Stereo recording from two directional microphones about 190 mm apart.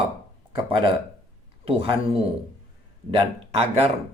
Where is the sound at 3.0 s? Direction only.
30° right (ahead or behind).